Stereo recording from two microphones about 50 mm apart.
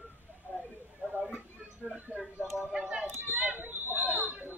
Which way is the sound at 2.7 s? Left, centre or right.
Centre.